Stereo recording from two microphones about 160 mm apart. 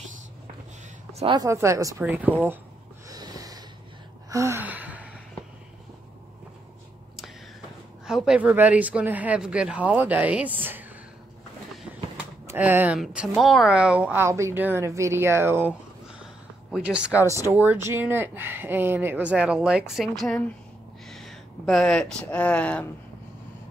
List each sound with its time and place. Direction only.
1.2 s a woman's voice: 30° right (ahead or behind)
1.5 s a woman's voice: 20° right (ahead or behind)
3.1 s snort: 20° right (ahead or behind)
4.3 s gasp: 20° right (ahead or behind)
8.1 s a woman's voice: 5° right (ahead or behind)
12.4 s a woman's voice: 10° right (ahead or behind)
16.7 s a woman's voice: 5° right (ahead or behind)
21.1 s a sound: centre (ahead or behind)
22.2 s speech: 10° left (ahead or behind)